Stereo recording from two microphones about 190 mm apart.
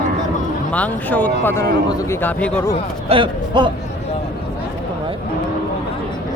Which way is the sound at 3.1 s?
25° right (ahead or behind).